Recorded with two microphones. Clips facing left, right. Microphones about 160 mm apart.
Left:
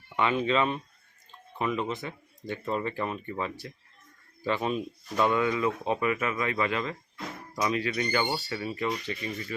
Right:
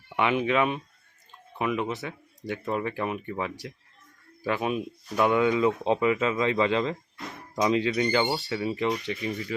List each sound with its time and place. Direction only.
0.2 s speech: 15° right (ahead or behind)